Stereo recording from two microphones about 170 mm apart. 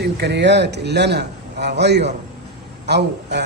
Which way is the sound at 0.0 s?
80° right.